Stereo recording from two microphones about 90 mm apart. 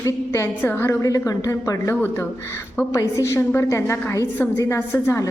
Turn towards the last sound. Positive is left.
turn(degrees=30)  # may be behind; listen again after turning